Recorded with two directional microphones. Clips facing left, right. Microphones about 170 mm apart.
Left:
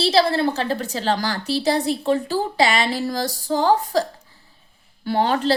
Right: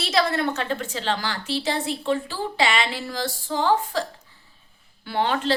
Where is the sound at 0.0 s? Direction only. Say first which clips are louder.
Left 5 dB; 30° left (ahead or behind).